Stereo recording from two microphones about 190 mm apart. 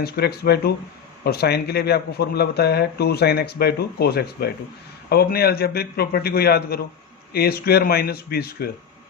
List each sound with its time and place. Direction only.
0.0 s speech: 55° left (ahead or behind)